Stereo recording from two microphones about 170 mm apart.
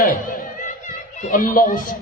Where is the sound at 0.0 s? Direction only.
55° left (ahead or behind).